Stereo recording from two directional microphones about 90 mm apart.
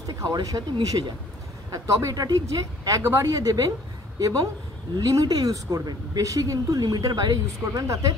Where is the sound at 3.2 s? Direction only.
40° right (ahead or behind).